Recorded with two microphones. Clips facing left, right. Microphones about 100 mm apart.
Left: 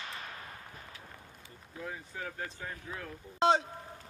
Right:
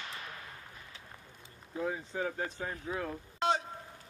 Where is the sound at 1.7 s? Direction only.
30° right (ahead or behind).